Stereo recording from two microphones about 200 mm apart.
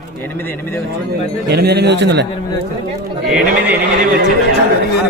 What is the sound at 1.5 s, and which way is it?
Speech, 55° right (ahead or behind).